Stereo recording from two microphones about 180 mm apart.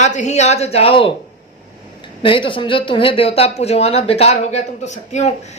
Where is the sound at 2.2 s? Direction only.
30° left (ahead or behind).